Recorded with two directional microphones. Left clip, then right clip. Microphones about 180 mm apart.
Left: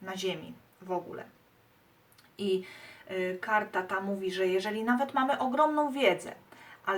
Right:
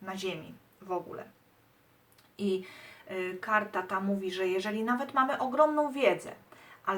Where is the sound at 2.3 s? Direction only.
10° left (ahead or behind).